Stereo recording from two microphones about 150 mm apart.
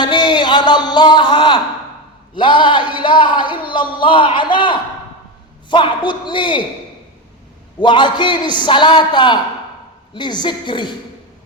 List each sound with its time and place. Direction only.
0.0 s a sound: 30° left (ahead or behind)
2.3 s a man's voice: 30° left (ahead or behind)
7.8 s a man's voice: 30° left (ahead or behind)